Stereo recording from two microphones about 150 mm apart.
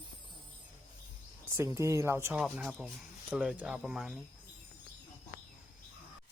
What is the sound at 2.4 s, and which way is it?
Speech, 5° right (ahead or behind).